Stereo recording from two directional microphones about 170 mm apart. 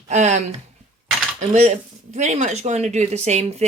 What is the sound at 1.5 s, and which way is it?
Speech, 45° right (ahead or behind).